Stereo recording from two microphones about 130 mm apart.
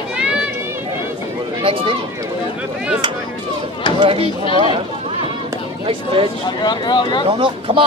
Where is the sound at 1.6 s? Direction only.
45° right (ahead or behind).